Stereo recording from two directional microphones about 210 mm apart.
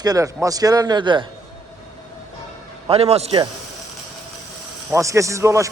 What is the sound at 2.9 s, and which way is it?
Speech, 30° right (ahead or behind).